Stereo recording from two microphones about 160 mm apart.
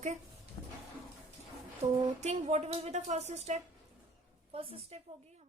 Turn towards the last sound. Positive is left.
turn(degrees=-35)  # may be behind; listen again after turning